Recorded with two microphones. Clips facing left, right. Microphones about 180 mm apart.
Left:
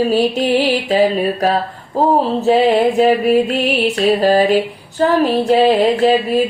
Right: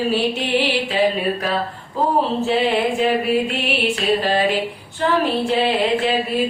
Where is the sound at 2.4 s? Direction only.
40° left (ahead or behind).